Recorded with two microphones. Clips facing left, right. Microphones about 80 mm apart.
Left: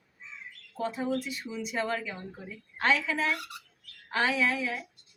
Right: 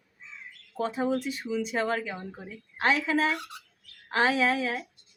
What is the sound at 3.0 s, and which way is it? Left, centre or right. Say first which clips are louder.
Speech: right 4 dB; right.